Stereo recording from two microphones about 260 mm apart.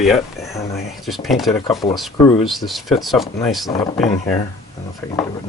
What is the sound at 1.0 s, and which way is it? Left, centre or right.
Speech, centre.